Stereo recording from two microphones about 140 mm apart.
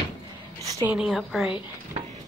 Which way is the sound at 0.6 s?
25° right (ahead or behind).